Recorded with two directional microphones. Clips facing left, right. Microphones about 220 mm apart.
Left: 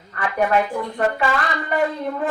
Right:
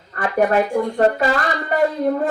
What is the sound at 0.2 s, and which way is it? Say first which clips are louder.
Speech: right 3 dB; 40° right (ahead or behind).